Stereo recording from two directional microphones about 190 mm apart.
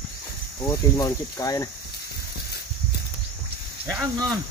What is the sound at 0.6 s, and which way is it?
Speech, 20° left (ahead or behind).